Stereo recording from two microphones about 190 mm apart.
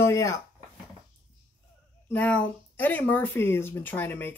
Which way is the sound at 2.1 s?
10° left (ahead or behind).